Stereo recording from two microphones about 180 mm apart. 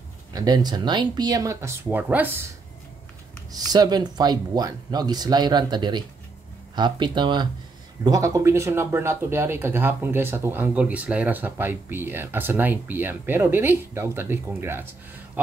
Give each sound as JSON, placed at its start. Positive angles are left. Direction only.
{"t": 0.3, "sound": "speech", "side_deg": -20}
{"t": 3.5, "sound": "speech", "side_deg": -20}